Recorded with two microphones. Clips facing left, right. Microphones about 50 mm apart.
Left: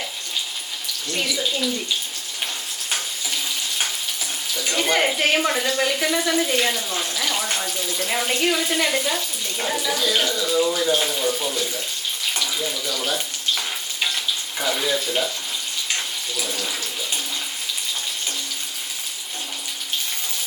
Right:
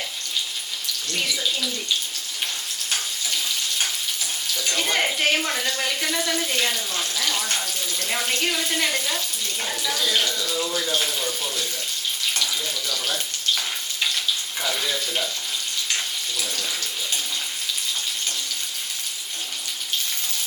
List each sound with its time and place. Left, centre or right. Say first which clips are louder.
1.1 s speech: left 2 dB; centre
2.9 s frying: left 1 dB; centre
4.5 s speech: left 3 dB; centre
14.6 s speech: left 5 dB; centre
16.4 s speech: left 4 dB; centre